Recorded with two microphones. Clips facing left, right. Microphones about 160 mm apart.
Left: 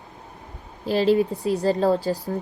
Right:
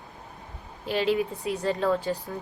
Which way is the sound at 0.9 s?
35° left (ahead or behind).